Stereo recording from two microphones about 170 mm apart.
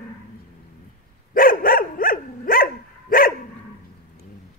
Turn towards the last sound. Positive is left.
turn(degrees=55)  # may be behind; listen again after turning